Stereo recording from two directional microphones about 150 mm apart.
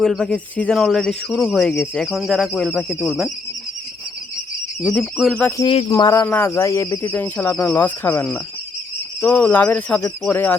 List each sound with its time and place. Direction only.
0.0 s speech: centre (ahead or behind)
4.8 s speech: 5° right (ahead or behind)
5.9 s speech: 25° left (ahead or behind)